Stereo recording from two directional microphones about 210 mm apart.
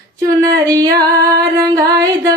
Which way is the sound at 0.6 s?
15° right (ahead or behind).